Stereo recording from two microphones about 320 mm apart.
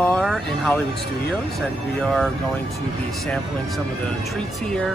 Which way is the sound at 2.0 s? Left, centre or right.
Centre.